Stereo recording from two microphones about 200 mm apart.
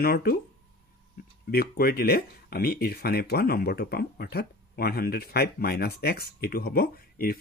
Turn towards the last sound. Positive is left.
turn(degrees=45)  # may be behind; listen again after turning